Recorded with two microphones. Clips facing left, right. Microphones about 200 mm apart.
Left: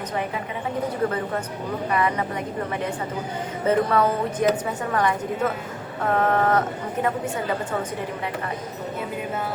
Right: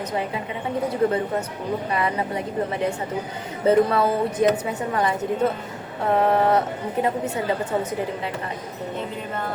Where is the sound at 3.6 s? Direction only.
25° right (ahead or behind).